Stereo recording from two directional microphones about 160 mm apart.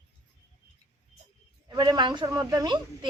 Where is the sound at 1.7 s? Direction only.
25° right (ahead or behind).